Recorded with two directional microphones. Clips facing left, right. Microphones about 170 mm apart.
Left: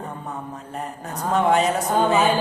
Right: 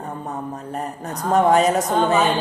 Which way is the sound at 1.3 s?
40° right (ahead or behind).